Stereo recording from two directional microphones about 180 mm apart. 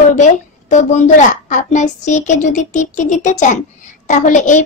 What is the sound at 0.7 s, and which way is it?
A child's voice, 45° left (ahead or behind).